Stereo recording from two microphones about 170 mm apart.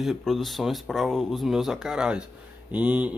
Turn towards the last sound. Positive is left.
turn(degrees=-10)  # may be behind; listen again after turning